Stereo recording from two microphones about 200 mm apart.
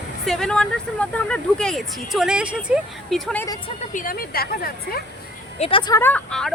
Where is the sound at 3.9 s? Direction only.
45° left (ahead or behind).